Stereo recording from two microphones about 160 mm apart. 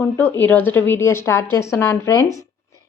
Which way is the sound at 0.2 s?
10° left (ahead or behind).